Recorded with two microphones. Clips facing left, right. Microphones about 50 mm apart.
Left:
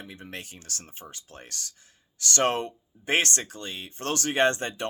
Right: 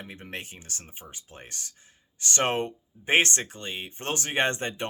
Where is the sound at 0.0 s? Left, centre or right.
Right.